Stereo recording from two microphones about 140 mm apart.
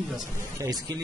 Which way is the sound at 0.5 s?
25° right (ahead or behind).